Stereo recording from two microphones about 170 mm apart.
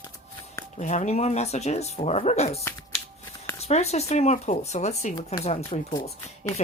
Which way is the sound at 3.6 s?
40° left (ahead or behind).